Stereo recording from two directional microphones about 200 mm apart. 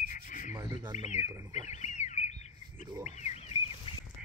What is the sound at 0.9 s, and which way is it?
Speech, 35° left (ahead or behind).